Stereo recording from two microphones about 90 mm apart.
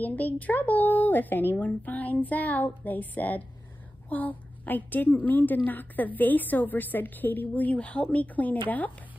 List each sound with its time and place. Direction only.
0.0 s a woman's voice: 20° left (ahead or behind)